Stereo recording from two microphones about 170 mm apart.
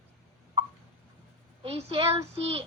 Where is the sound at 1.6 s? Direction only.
35° right (ahead or behind).